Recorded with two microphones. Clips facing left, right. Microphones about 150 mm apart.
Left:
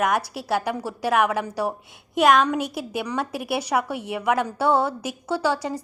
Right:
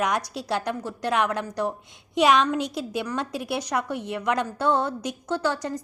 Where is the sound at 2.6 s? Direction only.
60° left (ahead or behind).